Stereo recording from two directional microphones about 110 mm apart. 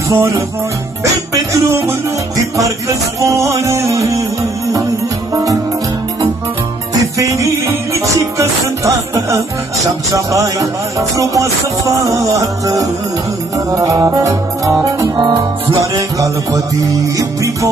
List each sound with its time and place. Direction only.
0.1 s music: 30° right (ahead or behind)
6.9 s music: 30° right (ahead or behind)
15.1 s music: 40° right (ahead or behind)